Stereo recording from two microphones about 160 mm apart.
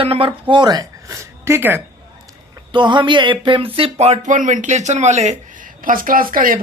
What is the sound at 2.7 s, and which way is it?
Speech, 30° right (ahead or behind).